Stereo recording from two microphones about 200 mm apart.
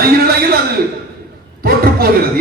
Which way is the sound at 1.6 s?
50° right (ahead or behind).